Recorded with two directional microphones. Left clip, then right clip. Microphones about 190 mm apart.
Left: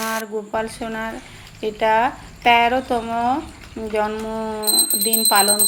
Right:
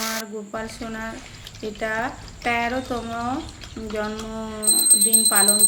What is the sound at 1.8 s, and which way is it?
Speech, 5° left (ahead or behind).